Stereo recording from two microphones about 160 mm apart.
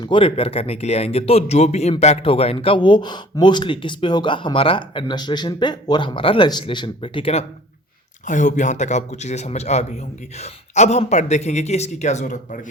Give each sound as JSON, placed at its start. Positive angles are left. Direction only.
{"t": 0.0, "sound": "speech", "side_deg": 30}
{"t": 8.2, "sound": "a man's voice", "side_deg": 50}